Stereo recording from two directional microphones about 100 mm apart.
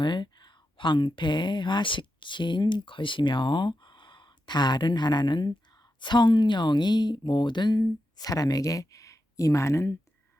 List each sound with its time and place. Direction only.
0.0 s speech: 50° left (ahead or behind); by 9.9 s 30° left (ahead or behind)